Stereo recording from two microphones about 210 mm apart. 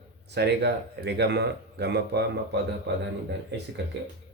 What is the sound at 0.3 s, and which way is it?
Speech, 55° right (ahead or behind).